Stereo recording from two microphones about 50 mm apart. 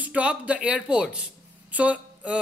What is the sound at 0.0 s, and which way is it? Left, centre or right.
Speech, right.